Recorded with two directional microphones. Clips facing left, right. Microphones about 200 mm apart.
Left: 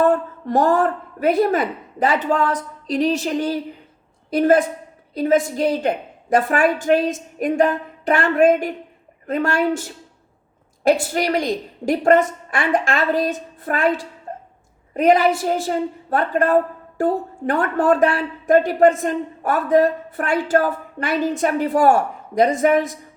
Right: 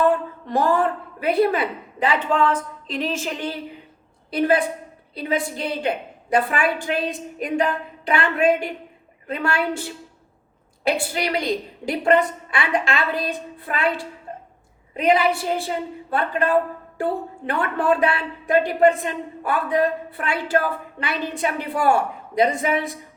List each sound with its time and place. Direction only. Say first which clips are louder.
0.0 s a woman's voice: left 2 dB; 45° left (ahead or behind)